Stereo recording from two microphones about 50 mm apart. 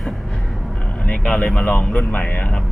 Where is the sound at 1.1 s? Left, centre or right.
Centre.